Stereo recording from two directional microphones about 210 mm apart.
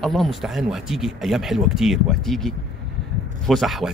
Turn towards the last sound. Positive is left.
turn(degrees=0)  # may be behind; listen again after turning